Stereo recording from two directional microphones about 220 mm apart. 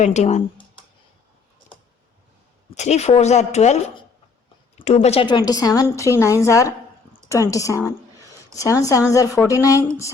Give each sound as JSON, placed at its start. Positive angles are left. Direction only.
{"t": 0.0, "sound": "speech", "side_deg": 30}
{"t": 2.6, "sound": "a woman's voice", "side_deg": 30}